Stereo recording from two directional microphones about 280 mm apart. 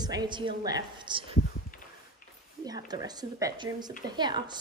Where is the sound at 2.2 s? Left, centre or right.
Left.